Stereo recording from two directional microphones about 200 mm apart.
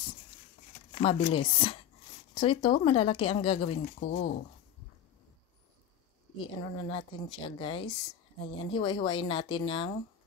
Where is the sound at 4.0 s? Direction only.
50° left (ahead or behind).